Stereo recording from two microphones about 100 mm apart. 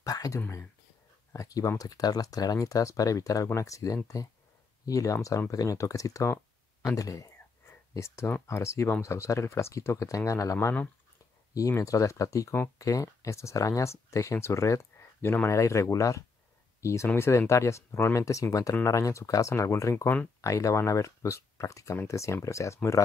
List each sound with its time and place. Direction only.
0.0 s speech: 35° left (ahead or behind)
11.7 s speech: 35° left (ahead or behind)